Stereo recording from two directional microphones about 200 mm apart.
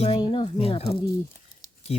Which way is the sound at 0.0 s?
25° left (ahead or behind).